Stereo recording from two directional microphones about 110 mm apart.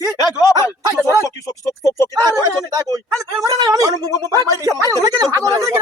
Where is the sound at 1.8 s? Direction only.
25° left (ahead or behind).